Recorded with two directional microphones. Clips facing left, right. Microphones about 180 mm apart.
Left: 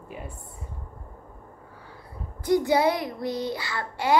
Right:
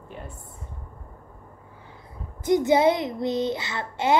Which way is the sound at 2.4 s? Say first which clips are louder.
Right 2 dB; 20° right (ahead or behind).